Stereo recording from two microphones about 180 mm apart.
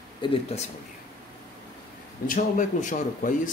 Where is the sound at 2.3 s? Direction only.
45° left (ahead or behind).